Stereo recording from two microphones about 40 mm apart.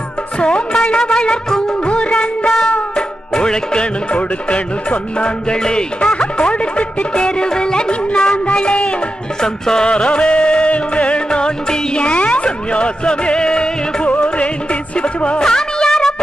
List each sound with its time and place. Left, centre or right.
0.4 s music: left
2.0 s music of bollywood: left
3.3 s music: left
9.4 s music: centre
10.0 s music: left
14.0 s music: left; by 16.2 s centre